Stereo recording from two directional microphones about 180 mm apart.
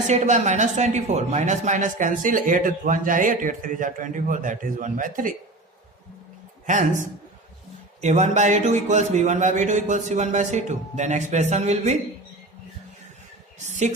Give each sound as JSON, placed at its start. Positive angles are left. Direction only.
{"t": 0.1, "sound": "speech", "side_deg": -40}
{"t": 8.0, "sound": "speech", "side_deg": -40}
{"t": 13.7, "sound": "speech", "side_deg": -40}